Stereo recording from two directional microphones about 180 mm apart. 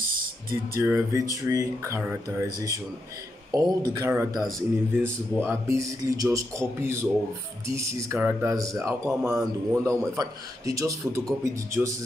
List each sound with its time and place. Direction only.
0.1 s a sound: 55° right (ahead or behind)
0.7 s a man's voice: 15° right (ahead or behind)
4.4 s a man's voice: centre (ahead or behind)
5.4 s a man's voice: 15° right (ahead or behind)